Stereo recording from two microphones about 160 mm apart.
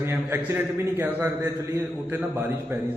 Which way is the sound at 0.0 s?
15° right (ahead or behind).